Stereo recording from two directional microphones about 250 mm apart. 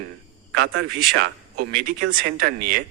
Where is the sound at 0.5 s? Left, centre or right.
Right.